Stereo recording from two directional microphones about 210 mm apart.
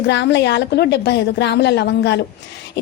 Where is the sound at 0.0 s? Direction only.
55° left (ahead or behind).